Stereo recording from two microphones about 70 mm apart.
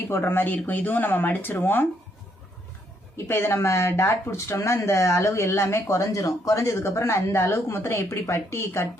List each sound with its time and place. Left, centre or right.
0.1 s speech: left
3.2 s speech: left